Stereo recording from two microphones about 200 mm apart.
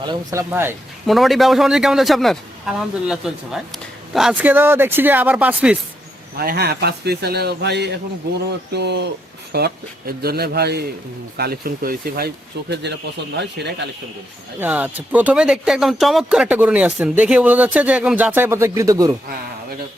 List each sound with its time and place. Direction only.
0.0 s speech: 20° right (ahead or behind)
1.0 s a man's voice: centre (ahead or behind)
6.4 s speech: 50° right (ahead or behind)
12.8 s speech: 60° right (ahead or behind)
14.6 s speech: 10° right (ahead or behind)